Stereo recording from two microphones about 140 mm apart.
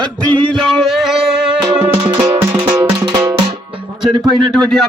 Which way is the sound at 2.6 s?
30° right (ahead or behind).